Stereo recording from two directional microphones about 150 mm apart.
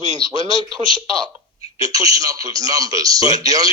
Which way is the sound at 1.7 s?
25° right (ahead or behind).